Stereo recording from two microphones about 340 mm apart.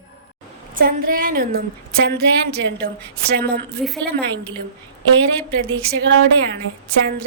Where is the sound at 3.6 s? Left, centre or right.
Centre.